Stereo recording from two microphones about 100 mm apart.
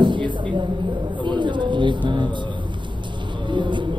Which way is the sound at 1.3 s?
50° right (ahead or behind).